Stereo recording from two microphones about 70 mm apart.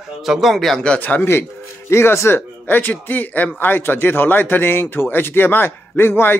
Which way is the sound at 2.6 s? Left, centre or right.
Left.